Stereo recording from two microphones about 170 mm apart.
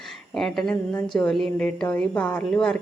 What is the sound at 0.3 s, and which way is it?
A woman's voice, centre (ahead or behind).